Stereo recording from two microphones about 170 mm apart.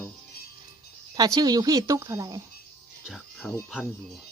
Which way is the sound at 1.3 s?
25° right (ahead or behind).